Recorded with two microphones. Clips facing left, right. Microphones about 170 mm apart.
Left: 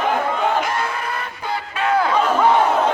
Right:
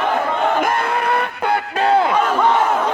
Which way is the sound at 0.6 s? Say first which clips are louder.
Right 5 dB; 55° right (ahead or behind).